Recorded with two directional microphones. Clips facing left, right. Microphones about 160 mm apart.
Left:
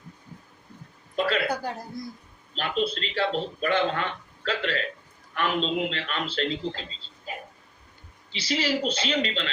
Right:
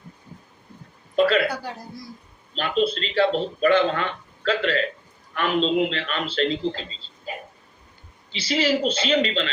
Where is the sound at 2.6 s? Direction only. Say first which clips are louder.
Right 5 dB; 90° right.